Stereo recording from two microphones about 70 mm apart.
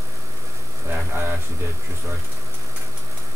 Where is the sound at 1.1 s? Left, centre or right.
Right.